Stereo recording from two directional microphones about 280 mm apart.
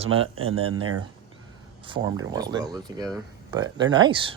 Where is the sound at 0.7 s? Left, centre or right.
Right.